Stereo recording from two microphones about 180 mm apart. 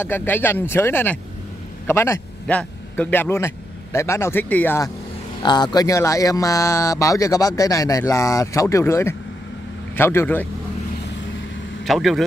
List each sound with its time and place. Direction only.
0.0 s a man's voice: 10° left (ahead or behind)
5.4 s speech: 25° left (ahead or behind)
11.8 s speech: centre (ahead or behind)